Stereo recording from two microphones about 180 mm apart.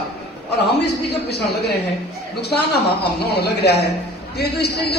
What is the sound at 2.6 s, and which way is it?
A man's voice, 65° left (ahead or behind).